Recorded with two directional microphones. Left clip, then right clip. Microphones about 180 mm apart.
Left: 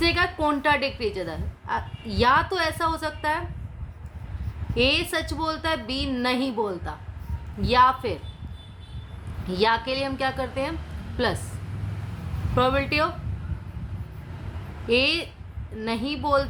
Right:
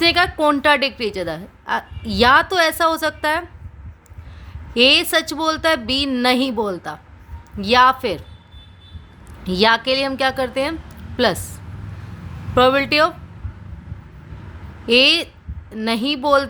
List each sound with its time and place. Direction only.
0.0 s a woman's voice: 50° right (ahead or behind)
4.7 s a woman's voice: 55° right (ahead or behind)
9.5 s a woman's voice: 50° right (ahead or behind)
12.5 s a woman's voice: 50° right (ahead or behind)
14.8 s a woman's voice: 50° right (ahead or behind)